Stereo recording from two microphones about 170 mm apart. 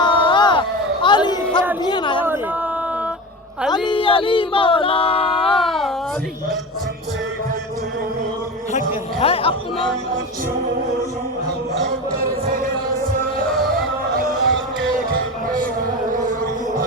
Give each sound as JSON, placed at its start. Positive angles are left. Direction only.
{"t": 0.0, "sound": "crowd", "side_deg": 30}
{"t": 1.0, "sound": "chatter", "side_deg": 25}
{"t": 1.8, "sound": "a sound", "side_deg": 25}
{"t": 3.7, "sound": "a sound", "side_deg": 30}
{"t": 5.5, "sound": "a sound", "side_deg": 0}
{"t": 9.1, "sound": "music", "side_deg": 35}
{"t": 11.7, "sound": "music", "side_deg": -60}
{"t": 13.5, "sound": "music", "side_deg": 0}
{"t": 14.1, "sound": "music", "side_deg": -55}